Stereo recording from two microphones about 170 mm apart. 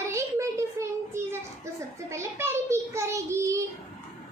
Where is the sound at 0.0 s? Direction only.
15° right (ahead or behind).